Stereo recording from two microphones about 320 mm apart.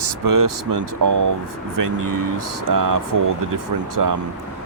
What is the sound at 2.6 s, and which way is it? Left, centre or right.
Speech, right.